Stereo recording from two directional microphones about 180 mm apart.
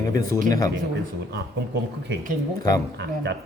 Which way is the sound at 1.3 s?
70° right (ahead or behind).